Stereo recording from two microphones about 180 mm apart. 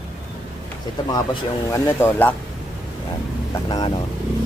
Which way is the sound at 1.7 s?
15° left (ahead or behind).